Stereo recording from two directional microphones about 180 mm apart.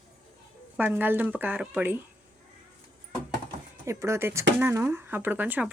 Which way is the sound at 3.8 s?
15° right (ahead or behind).